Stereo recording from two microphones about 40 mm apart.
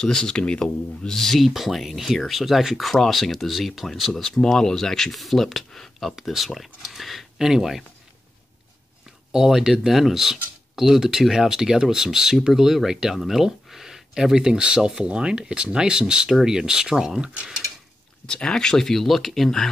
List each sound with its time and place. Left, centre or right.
0.0 s speech: centre
1.0 s speech: centre
4.4 s speech: centre
9.3 s speech: centre
14.3 s speech: centre
18.2 s speech: centre